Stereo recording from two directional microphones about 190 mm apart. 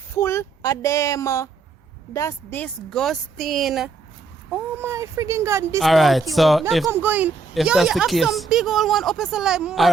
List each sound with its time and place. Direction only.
0.2 s speech: 15° left (ahead or behind)
4.5 s speech: 15° right (ahead or behind)
5.8 s speech: centre (ahead or behind)
6.8 s speech: 10° right (ahead or behind)